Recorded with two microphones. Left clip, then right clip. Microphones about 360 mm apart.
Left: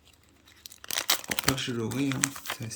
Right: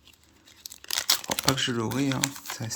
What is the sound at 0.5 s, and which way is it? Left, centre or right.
Tearing, centre.